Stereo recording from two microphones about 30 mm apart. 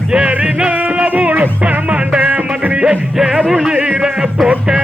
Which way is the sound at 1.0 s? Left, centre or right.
Right.